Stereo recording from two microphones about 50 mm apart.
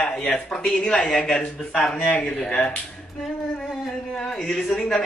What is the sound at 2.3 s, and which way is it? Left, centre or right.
Speech, centre.